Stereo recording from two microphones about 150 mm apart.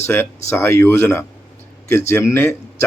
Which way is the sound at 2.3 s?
15° left (ahead or behind).